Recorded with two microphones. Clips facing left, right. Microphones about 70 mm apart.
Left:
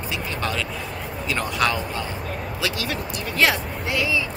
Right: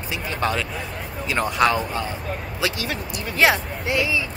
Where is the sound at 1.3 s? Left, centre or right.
Right.